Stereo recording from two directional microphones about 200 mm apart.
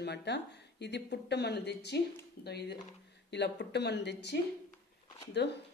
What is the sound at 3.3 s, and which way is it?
Speech, 60° left (ahead or behind).